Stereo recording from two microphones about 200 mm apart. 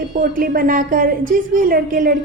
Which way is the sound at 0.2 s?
45° right (ahead or behind).